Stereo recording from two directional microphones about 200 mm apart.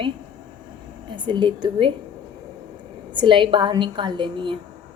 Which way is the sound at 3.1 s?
25° right (ahead or behind).